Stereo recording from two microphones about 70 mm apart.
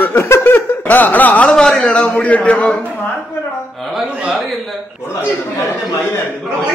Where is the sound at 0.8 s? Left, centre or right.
Left.